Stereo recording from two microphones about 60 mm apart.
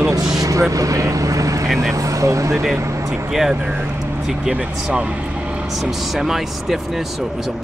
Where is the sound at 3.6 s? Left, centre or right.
Right.